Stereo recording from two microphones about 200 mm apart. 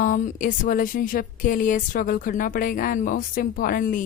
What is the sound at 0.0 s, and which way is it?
Speech, 40° left (ahead or behind).